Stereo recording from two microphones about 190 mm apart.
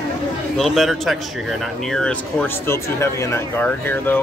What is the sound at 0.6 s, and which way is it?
Speech, centre (ahead or behind).